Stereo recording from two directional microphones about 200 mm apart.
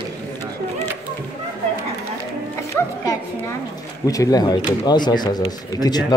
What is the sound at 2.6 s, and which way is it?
Speech, 15° left (ahead or behind).